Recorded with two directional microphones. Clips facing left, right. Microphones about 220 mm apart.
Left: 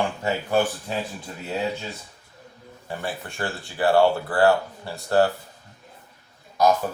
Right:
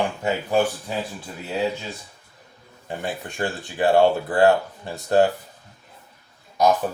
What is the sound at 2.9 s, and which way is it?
Speech, 20° right (ahead or behind).